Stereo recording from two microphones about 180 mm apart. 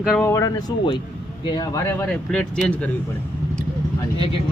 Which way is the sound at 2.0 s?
5° left (ahead or behind).